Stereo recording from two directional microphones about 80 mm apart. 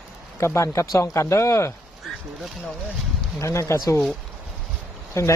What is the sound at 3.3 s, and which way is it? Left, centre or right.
Speech, left.